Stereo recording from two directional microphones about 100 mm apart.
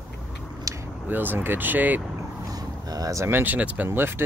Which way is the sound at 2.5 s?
40° right (ahead or behind).